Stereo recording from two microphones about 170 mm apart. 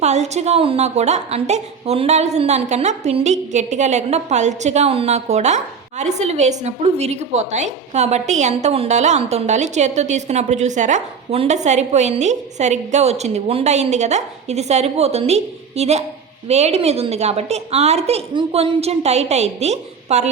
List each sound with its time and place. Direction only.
0.0 s a woman's voice: 40° right (ahead or behind)